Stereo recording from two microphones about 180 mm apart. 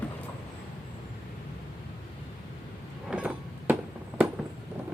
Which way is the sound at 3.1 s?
5° right (ahead or behind).